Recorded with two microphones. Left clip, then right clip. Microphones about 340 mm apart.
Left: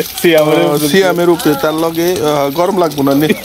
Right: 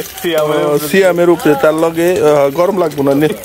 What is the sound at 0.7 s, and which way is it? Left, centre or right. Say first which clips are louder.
Speech: even; centre.